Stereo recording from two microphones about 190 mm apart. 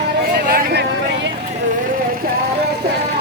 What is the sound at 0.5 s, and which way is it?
Vehicle, 60° right (ahead or behind).